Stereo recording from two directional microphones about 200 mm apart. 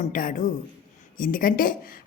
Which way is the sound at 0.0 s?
45° left (ahead or behind).